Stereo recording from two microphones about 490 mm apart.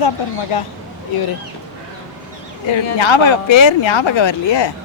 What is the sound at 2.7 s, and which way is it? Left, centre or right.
Speech, left.